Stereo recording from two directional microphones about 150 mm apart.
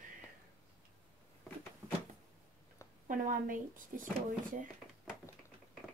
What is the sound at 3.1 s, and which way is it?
Speech, 65° right (ahead or behind).